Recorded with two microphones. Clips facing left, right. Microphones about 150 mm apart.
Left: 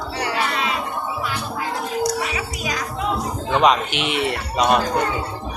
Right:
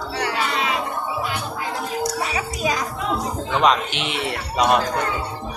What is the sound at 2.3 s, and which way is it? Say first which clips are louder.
Music: right 3 dB; 35° right (ahead or behind).